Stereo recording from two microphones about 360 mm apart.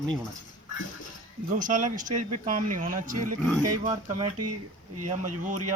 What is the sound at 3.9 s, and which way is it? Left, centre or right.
Speech, centre.